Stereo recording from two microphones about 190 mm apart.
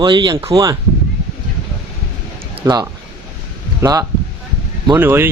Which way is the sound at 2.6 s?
20° right (ahead or behind).